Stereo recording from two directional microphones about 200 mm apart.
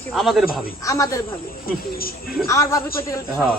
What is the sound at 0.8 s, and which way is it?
Speech, 15° left (ahead or behind).